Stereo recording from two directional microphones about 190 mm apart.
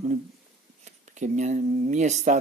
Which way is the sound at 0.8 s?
40° right (ahead or behind).